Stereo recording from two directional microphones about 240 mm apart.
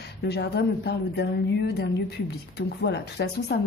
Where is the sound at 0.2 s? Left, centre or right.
Left.